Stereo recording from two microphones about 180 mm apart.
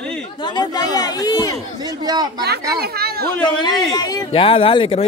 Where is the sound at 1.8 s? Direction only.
20° right (ahead or behind).